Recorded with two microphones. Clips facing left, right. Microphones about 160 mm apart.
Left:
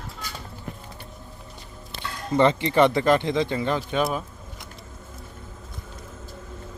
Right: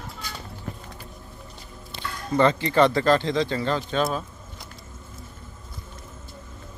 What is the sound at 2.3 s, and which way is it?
Speech, 25° left (ahead or behind).